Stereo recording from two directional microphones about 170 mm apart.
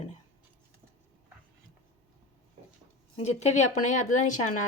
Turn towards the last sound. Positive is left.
turn(degrees=50)  # may be behind; listen again after turning